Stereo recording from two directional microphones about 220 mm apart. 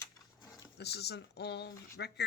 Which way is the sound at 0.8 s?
50° left (ahead or behind).